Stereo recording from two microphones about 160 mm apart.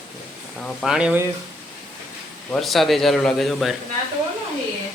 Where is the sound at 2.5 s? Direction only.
Centre (ahead or behind).